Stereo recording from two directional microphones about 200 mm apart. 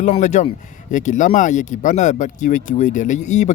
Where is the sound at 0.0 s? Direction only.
35° left (ahead or behind).